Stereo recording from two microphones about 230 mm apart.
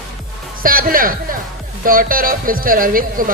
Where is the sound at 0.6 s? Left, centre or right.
Right.